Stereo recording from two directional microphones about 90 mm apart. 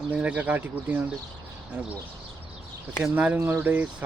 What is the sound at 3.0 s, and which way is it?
Speech, 15° right (ahead or behind).